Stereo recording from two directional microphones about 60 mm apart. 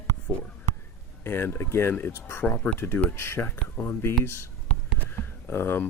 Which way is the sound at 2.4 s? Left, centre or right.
Left.